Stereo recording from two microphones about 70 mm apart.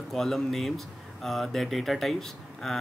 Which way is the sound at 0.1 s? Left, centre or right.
Centre.